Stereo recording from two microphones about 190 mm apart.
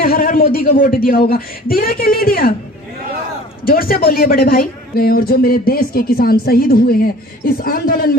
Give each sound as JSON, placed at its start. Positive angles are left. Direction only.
{"t": 0.0, "sound": "speech", "side_deg": 50}
{"t": 3.7, "sound": "speech", "side_deg": 50}